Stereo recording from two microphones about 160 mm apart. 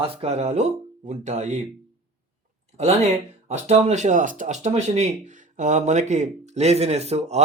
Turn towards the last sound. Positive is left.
turn(degrees=-45)  # may be behind; listen again after turning